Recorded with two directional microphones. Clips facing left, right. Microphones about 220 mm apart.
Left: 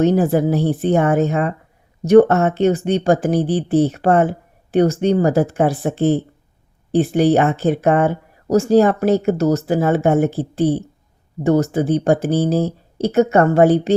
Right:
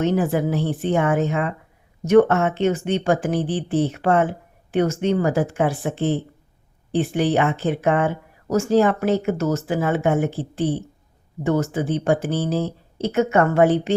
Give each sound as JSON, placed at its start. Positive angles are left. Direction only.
{"t": 0.0, "sound": "speech", "side_deg": 35}